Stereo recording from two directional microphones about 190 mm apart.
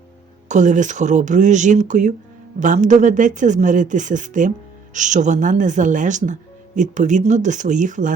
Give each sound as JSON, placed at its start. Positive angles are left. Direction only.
{"t": 0.4, "sound": "speech", "side_deg": -40}